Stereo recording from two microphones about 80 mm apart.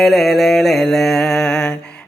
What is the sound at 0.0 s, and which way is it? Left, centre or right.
Mantra, centre.